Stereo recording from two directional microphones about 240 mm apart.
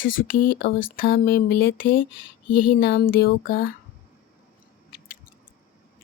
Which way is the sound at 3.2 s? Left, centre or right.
Left.